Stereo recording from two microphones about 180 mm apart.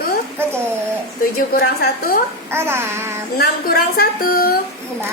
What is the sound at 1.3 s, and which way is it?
Speech, 55° left (ahead or behind).